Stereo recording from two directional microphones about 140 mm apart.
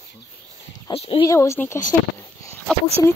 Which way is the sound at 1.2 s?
20° left (ahead or behind).